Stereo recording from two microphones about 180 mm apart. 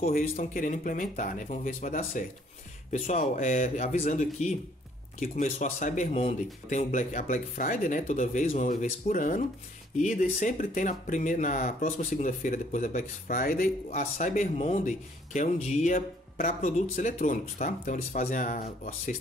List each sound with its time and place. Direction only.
0.1 s speech: 55° left (ahead or behind)